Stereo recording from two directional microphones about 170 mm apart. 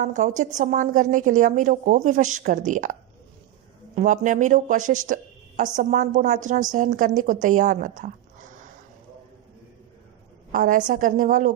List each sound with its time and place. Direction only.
0.0 s a woman's voice: 45° right (ahead or behind)
3.9 s a woman's voice: 45° right (ahead or behind)
10.5 s a woman's voice: 50° right (ahead or behind)